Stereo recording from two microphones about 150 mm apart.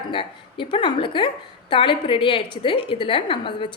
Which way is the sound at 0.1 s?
35° left (ahead or behind).